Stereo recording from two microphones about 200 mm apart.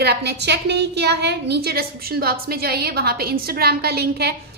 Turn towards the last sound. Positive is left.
turn(degrees=-55)  # may be behind; listen again after turning